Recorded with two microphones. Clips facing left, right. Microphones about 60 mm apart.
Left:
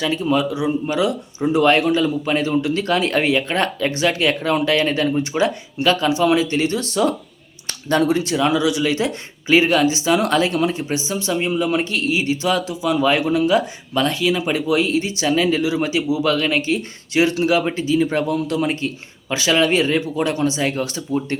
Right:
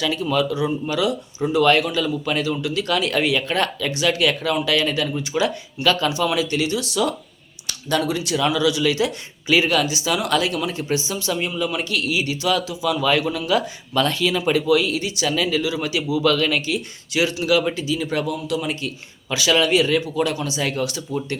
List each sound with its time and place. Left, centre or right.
0.0 s speech: left